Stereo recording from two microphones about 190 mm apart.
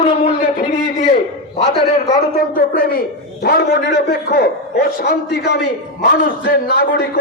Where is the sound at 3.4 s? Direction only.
60° left (ahead or behind).